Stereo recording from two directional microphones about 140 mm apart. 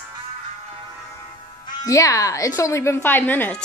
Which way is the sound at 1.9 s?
25° left (ahead or behind).